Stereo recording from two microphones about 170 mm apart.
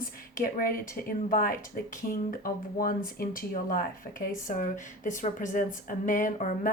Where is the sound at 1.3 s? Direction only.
55° left (ahead or behind).